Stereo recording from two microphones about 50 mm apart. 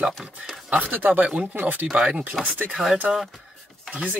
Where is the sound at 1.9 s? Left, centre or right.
Centre.